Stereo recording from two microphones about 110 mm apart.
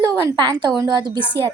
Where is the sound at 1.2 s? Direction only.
20° left (ahead or behind).